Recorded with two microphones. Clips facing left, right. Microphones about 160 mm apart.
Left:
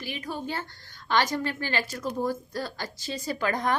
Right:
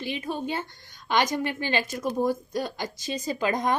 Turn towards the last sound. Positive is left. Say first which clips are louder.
# right 2 dB
turn(degrees=-20)  # may be behind; listen again after turning